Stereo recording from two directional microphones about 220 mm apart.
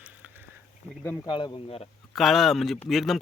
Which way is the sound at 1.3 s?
25° left (ahead or behind).